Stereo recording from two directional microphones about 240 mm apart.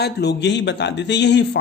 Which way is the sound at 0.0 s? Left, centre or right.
Left.